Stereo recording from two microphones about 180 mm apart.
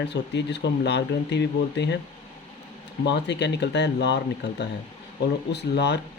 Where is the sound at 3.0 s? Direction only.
75° left (ahead or behind).